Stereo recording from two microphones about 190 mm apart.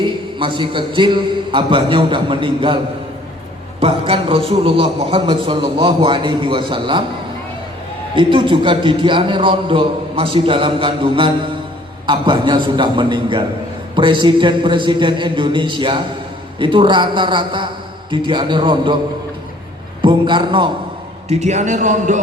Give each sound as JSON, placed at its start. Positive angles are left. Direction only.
{"t": 0.0, "sound": "a man's voice", "side_deg": -25}
{"t": 8.1, "sound": "a man's voice", "side_deg": -25}
{"t": 20.0, "sound": "a man's voice", "side_deg": -25}
{"t": 21.2, "sound": "speech", "side_deg": -35}